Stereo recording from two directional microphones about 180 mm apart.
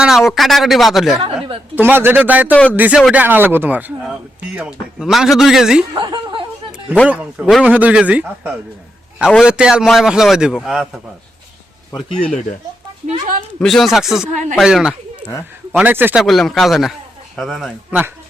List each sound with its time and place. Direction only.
0.0 s a sound: centre (ahead or behind)
0.3 s a man's voice: centre (ahead or behind)
1.7 s speech: 10° right (ahead or behind)
2.5 s speech: 10° left (ahead or behind)
2.7 s a man's voice: 10° right (ahead or behind)
5.9 s snicker: 25° right (ahead or behind)
7.1 s a man's voice: 5° right (ahead or behind)
11.9 s speech: 25° left (ahead or behind)
12.3 s speech: 40° left (ahead or behind)
13.6 s a man's voice: centre (ahead or behind)
16.2 s a man's voice: centre (ahead or behind)